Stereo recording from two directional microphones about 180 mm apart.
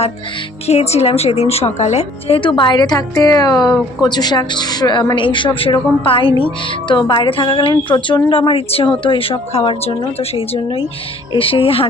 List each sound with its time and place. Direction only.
0.7 s a woman's voice: 35° left (ahead or behind)